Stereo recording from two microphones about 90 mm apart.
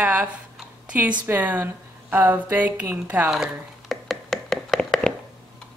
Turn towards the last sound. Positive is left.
turn(degrees=10)  # may be behind; listen again after turning